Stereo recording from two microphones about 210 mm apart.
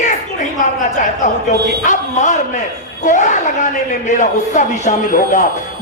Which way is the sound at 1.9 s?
35° left (ahead or behind).